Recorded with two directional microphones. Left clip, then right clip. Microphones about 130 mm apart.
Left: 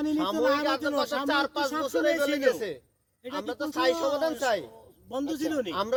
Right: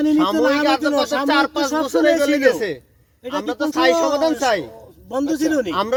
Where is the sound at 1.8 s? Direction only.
90° right.